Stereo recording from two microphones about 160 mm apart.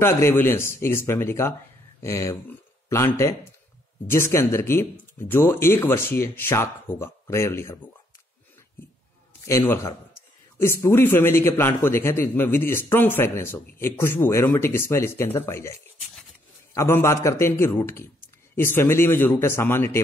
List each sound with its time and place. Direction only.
0.0 s a man's voice: 15° left (ahead or behind)
9.4 s a man's voice: 20° left (ahead or behind)